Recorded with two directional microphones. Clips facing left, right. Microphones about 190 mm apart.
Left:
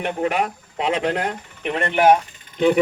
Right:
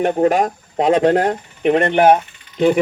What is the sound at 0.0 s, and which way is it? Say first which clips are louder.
Speech: right 7 dB; 40° right (ahead or behind).